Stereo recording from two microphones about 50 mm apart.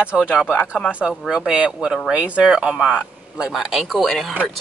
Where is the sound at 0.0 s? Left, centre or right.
Right.